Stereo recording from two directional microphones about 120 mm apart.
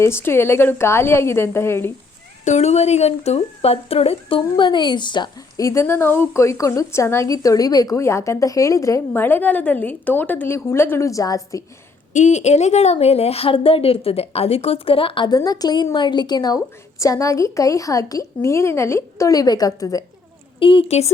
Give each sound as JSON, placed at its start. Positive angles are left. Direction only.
{"t": 0.0, "sound": "a woman's voice", "side_deg": 20}
{"t": 2.4, "sound": "speech", "side_deg": 75}
{"t": 5.6, "sound": "a woman's voice", "side_deg": 25}
{"t": 12.1, "sound": "speech", "side_deg": 85}
{"t": 15.4, "sound": "a woman's voice", "side_deg": 30}
{"t": 20.6, "sound": "speech", "side_deg": 45}